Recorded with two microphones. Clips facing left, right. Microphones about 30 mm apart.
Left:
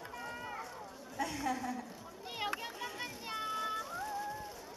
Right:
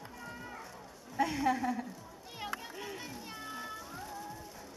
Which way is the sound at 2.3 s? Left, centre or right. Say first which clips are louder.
Left 2 dB; left.